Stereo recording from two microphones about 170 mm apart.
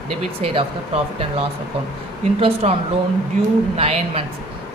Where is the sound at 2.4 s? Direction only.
35° right (ahead or behind).